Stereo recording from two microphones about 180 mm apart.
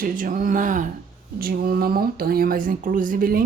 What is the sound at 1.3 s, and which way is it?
Speech, 55° right (ahead or behind).